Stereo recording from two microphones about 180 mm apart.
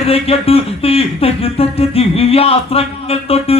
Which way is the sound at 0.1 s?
35° left (ahead or behind).